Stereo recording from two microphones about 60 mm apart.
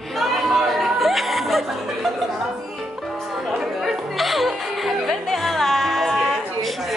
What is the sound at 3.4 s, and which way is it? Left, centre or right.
Music, centre.